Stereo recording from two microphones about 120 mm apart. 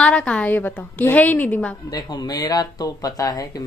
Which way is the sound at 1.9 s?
35° left (ahead or behind).